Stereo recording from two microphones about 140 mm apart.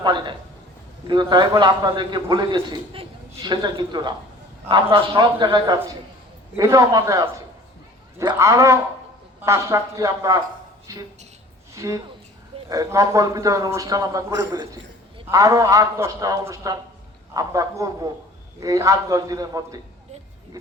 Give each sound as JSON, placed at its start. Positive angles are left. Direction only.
{"t": 0.0, "sound": "a man's voice", "side_deg": -35}
{"t": 11.7, "sound": "a man's voice", "side_deg": -25}